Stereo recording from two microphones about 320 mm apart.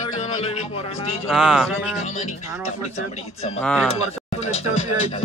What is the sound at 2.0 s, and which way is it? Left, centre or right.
Speech, left.